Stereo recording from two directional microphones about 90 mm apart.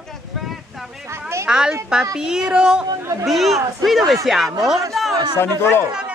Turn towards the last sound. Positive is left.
turn(degrees=25)  # may be behind; listen again after turning